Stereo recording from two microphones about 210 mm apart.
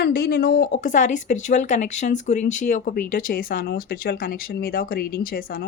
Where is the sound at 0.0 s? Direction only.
45° left (ahead or behind).